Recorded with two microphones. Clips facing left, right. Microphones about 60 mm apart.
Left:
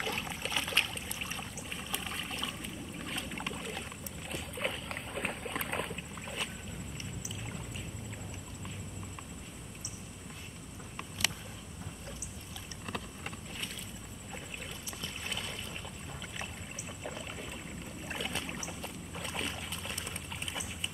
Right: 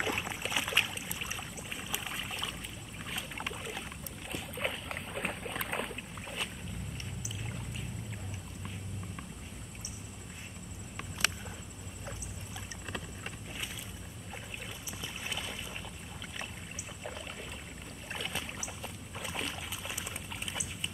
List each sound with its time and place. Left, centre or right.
0.0 s a sound: centre
3.0 s boat: centre
15.0 s boat: centre
17.0 s boat: centre